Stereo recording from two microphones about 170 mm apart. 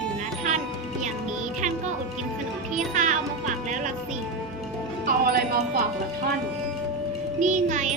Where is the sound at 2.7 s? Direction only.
45° right (ahead or behind).